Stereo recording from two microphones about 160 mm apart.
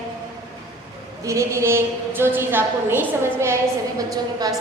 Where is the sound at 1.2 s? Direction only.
20° right (ahead or behind).